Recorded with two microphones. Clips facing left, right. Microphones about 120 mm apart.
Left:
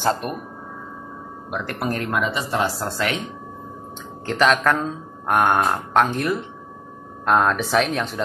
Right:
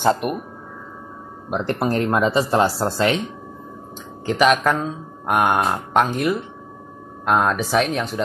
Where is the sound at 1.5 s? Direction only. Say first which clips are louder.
Right 5 dB; 30° right (ahead or behind).